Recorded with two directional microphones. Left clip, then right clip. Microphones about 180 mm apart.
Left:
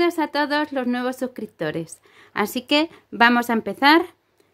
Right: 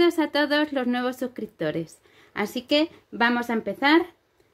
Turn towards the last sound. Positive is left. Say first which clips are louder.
# left 4 dB
turn(degrees=30)  # may be behind; listen again after turning